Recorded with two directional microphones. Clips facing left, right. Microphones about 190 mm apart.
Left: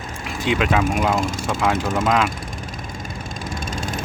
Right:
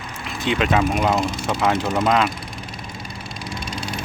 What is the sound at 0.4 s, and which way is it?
Speech, centre (ahead or behind).